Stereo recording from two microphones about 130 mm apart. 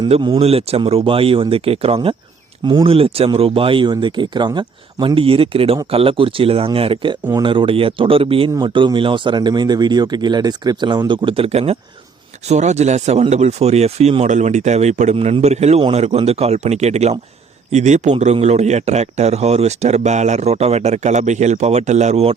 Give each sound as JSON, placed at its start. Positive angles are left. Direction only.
{"t": 0.3, "sound": "a man's voice", "side_deg": -50}